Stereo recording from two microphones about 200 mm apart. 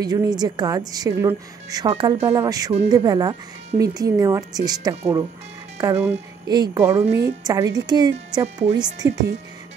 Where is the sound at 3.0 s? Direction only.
20° right (ahead or behind).